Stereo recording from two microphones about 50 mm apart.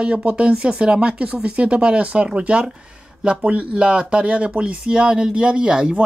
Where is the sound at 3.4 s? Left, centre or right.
Right.